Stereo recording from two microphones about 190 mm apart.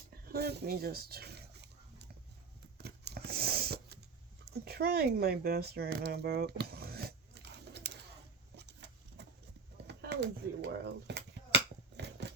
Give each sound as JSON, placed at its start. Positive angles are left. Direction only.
{"t": 0.3, "sound": "speech", "side_deg": -55}
{"t": 2.7, "sound": "a sound", "side_deg": -60}
{"t": 9.8, "sound": "cap gun", "side_deg": -65}